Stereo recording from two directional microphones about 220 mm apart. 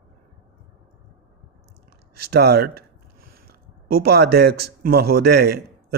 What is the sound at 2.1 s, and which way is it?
Speech, 45° right (ahead or behind).